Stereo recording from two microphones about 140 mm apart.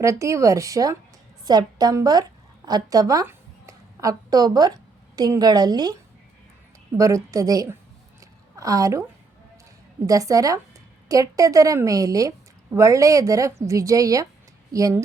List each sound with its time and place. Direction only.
0.0 s a woman's voice: 20° right (ahead or behind)
8.2 s a sound: 25° right (ahead or behind)
10.1 s a woman's voice: 25° right (ahead or behind)